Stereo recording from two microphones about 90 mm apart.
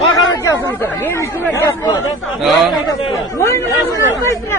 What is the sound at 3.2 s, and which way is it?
Speech, 35° left (ahead or behind).